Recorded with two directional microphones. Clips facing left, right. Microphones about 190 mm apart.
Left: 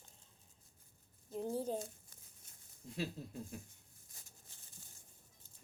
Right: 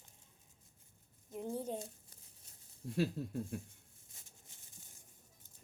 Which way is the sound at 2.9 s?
55° right (ahead or behind).